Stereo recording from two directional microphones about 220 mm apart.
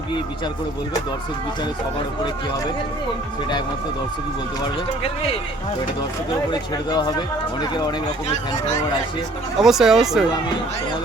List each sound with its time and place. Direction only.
6.5 s speech: 20° left (ahead or behind)
9.6 s speech: centre (ahead or behind)